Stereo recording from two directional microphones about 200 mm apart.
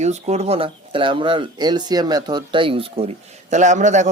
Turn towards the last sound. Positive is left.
turn(degrees=-35)  # may be behind; listen again after turning